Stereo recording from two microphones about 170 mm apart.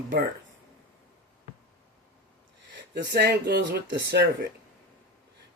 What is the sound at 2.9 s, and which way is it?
Speech, 70° right (ahead or behind).